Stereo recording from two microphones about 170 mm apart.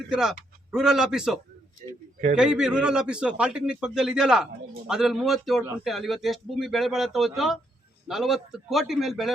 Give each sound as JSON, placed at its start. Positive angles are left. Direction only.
{"t": 0.1, "sound": "a man's voice", "side_deg": -5}
{"t": 1.8, "sound": "speech", "side_deg": -45}
{"t": 2.3, "sound": "a man's voice", "side_deg": -5}